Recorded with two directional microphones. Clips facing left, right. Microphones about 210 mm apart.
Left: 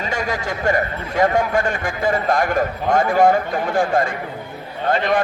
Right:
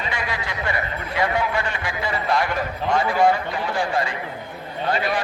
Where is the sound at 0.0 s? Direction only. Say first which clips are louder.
Left 5 dB; 45° left (ahead or behind).